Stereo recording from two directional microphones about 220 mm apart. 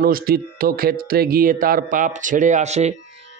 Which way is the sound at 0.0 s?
40° right (ahead or behind).